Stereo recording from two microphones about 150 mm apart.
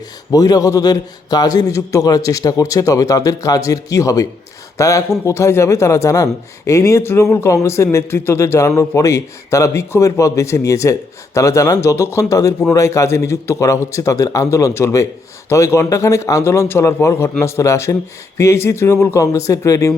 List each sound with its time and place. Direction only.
0.3 s a man's voice: 25° left (ahead or behind)